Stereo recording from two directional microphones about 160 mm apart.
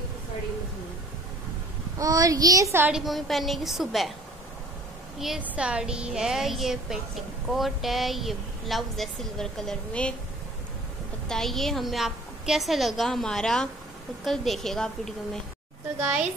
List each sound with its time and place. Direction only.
2.0 s a child's voice: 20° right (ahead or behind)
2.9 s a woman's voice: centre (ahead or behind)
5.2 s a woman's voice: 5° right (ahead or behind)
11.2 s a woman's voice: centre (ahead or behind)